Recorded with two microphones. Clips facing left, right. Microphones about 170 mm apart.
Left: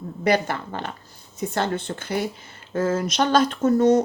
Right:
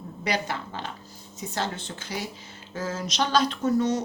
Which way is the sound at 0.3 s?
50° left (ahead or behind).